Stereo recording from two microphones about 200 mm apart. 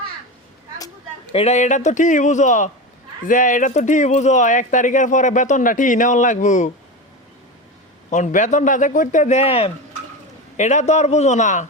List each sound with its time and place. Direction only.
1.3 s speech: 30° left (ahead or behind)
8.1 s speech: 40° left (ahead or behind)